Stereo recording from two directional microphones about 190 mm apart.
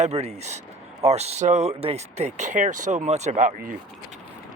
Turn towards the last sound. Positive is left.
turn(degrees=-40)  # may be behind; listen again after turning